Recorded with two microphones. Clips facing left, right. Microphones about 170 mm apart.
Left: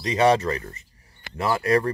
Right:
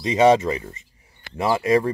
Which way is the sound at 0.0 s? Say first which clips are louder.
Right 3 dB; 20° right (ahead or behind).